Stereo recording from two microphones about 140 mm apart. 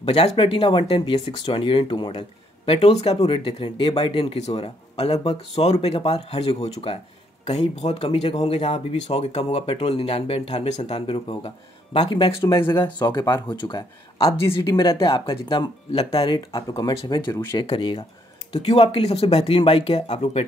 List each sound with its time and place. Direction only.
0.0 s speech: 45° left (ahead or behind)
14.1 s speech: 45° left (ahead or behind)
14.6 s speech: 30° left (ahead or behind)